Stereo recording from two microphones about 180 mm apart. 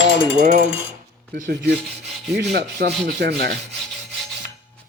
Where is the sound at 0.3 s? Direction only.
40° right (ahead or behind).